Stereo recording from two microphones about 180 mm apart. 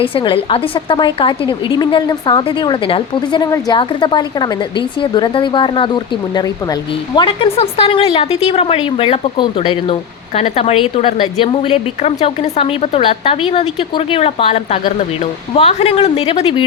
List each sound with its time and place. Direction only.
0.0 s a woman's voice: 30° left (ahead or behind)